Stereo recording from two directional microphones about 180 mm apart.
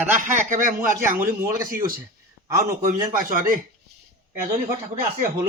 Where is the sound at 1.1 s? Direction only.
15° right (ahead or behind).